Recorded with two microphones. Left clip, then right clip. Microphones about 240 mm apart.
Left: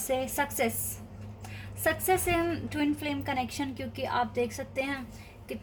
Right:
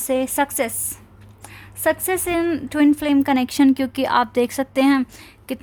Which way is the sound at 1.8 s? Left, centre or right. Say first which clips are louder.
Right 7 dB; right.